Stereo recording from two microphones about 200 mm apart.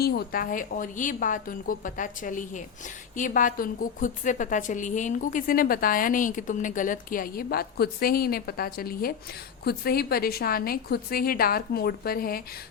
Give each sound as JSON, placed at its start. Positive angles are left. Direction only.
{"t": 0.0, "sound": "a woman's voice", "side_deg": 50}